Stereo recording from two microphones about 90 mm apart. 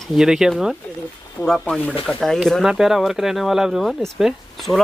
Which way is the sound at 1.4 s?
25° left (ahead or behind).